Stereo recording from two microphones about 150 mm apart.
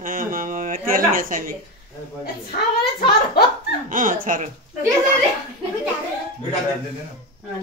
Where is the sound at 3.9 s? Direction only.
65° right (ahead or behind).